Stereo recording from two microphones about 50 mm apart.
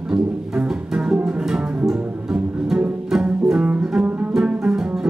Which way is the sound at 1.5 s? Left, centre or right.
Centre.